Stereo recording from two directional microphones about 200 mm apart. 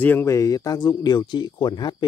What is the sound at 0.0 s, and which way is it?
Speech, 10° left (ahead or behind).